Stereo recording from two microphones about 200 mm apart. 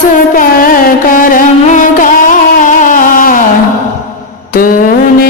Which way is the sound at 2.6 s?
40° left (ahead or behind).